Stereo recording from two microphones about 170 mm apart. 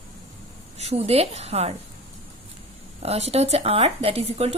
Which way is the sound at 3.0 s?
35° right (ahead or behind).